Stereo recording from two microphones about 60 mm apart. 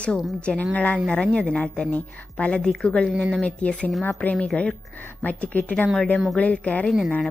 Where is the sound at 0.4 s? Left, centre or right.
Centre.